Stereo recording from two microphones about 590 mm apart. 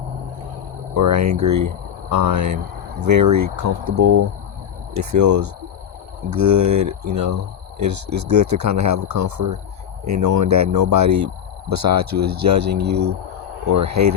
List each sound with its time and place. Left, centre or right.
0.9 s speech: right